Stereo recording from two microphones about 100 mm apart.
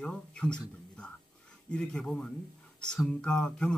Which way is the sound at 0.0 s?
10° left (ahead or behind).